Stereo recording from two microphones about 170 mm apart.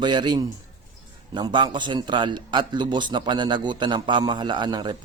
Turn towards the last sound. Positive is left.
turn(degrees=-25)  # may be behind; listen again after turning